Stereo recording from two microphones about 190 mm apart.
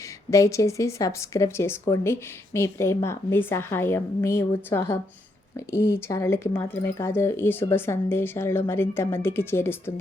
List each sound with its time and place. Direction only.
0.3 s speech: 15° left (ahead or behind)